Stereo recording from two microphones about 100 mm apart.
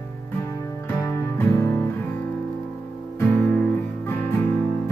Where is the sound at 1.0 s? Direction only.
30° left (ahead or behind).